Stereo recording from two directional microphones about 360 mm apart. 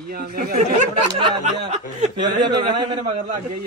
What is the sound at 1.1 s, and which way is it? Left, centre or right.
Speech, centre.